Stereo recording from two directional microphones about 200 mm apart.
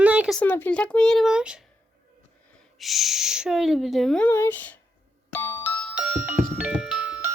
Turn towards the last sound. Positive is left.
turn(degrees=-5)  # may be behind; listen again after turning